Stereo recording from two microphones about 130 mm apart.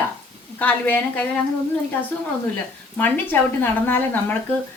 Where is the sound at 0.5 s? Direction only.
10° left (ahead or behind).